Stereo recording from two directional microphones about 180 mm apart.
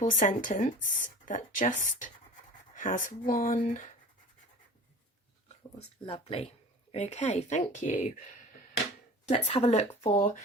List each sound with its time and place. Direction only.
0.0 s speech: 45° left (ahead or behind)
6.1 s speech: 30° left (ahead or behind)
9.3 s speech: 35° left (ahead or behind)